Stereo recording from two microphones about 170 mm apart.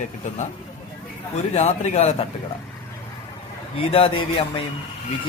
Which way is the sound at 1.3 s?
40° left (ahead or behind).